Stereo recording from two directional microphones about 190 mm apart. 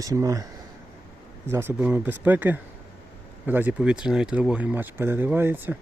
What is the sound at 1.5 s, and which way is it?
Speech, 10° right (ahead or behind).